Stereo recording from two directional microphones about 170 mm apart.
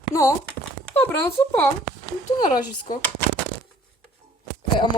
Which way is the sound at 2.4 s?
50° left (ahead or behind).